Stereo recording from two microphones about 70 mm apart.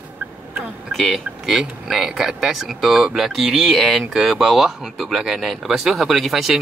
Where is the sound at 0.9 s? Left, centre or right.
Centre.